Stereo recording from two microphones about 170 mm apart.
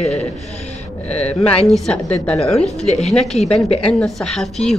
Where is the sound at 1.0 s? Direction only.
40° left (ahead or behind).